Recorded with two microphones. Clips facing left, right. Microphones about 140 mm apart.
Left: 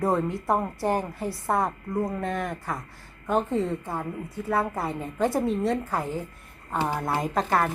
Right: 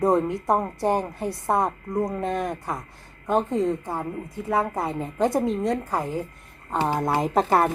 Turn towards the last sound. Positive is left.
turn(degrees=-25)  # may be behind; listen again after turning